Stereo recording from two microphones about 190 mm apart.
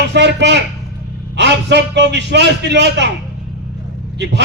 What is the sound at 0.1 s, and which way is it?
A man's voice, 65° right (ahead or behind).